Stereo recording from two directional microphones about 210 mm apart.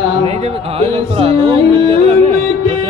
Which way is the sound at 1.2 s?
25° right (ahead or behind).